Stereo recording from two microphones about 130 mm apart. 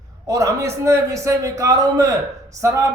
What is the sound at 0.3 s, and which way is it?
A man's voice, 25° right (ahead or behind).